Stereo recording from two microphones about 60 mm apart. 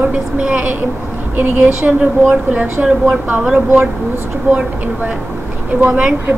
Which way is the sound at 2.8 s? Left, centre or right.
Centre.